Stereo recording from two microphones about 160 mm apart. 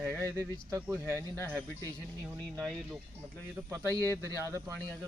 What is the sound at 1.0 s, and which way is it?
Speech, 15° left (ahead or behind).